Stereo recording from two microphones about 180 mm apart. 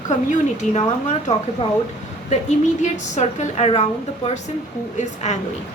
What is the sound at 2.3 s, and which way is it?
A woman's voice, 40° left (ahead or behind).